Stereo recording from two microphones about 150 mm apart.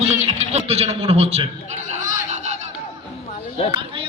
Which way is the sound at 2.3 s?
50° right (ahead or behind).